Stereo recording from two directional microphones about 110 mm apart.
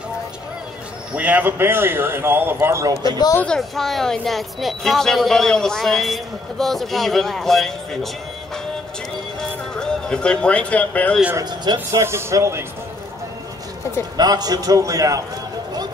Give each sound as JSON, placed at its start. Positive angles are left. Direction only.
{"t": 1.1, "sound": "a man's voice", "side_deg": -15}
{"t": 3.0, "sound": "speech", "side_deg": 35}
{"t": 3.3, "sound": "speech", "side_deg": 5}
{"t": 9.4, "sound": "a sound", "side_deg": 5}
{"t": 11.9, "sound": "a man's voice", "side_deg": -25}
{"t": 14.1, "sound": "a man's voice", "side_deg": -35}